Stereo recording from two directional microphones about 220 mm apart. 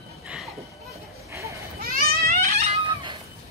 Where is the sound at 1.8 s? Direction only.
40° right (ahead or behind).